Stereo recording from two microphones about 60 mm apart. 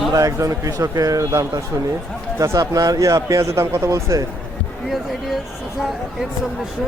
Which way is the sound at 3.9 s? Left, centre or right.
Right.